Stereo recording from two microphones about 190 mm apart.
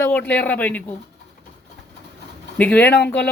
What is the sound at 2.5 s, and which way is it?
Speech, 10° left (ahead or behind).